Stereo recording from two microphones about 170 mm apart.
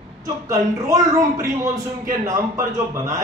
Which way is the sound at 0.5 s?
20° right (ahead or behind).